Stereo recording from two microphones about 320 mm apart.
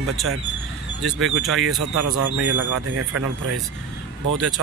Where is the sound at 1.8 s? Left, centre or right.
Right.